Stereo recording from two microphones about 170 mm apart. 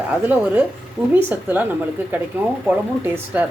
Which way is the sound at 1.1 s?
10° right (ahead or behind).